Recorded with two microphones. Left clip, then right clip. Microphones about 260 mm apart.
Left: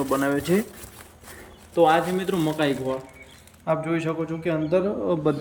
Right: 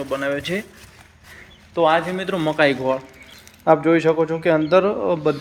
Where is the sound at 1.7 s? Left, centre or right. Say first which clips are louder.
Right 1 dB; centre.